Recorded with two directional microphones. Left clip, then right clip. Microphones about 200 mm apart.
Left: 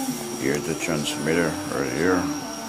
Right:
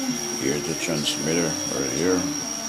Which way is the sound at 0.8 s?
Centre (ahead or behind).